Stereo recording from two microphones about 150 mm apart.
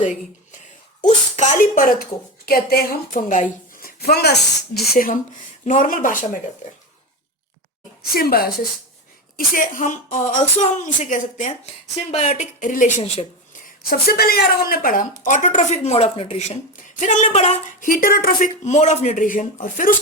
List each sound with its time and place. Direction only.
0.0 s speech: 55° left (ahead or behind)
2.5 s a woman's voice: 90° left; by 6.4 s 60° left (ahead or behind)
8.1 s a woman's voice: 90° left
9.6 s a woman's voice: 60° left (ahead or behind)
12.1 s a woman's voice: 45° left (ahead or behind); by 12.9 s 60° left (ahead or behind)
14.1 s a woman's voice: 90° left; by 16.6 s 45° left (ahead or behind)
16.7 s speech: 55° left (ahead or behind)
17.7 s a woman's voice: 65° left (ahead or behind)